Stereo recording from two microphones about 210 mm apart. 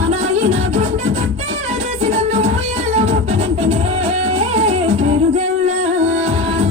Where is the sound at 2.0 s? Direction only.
30° right (ahead or behind).